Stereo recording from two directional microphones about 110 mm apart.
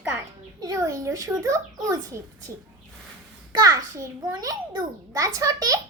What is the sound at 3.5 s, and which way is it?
A child's voice, 35° right (ahead or behind).